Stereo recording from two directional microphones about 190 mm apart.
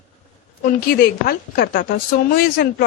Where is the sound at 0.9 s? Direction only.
50° left (ahead or behind).